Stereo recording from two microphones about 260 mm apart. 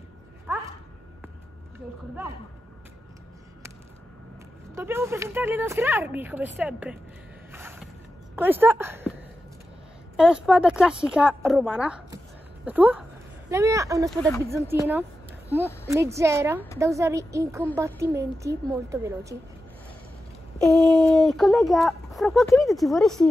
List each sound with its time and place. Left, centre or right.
0.5 s a sound: centre
4.7 s speech: centre
7.5 s mechanisms: centre
8.4 s speech: centre
10.1 s speech: centre
14.1 s speech: centre
14.5 s speech: centre
20.5 s speech: centre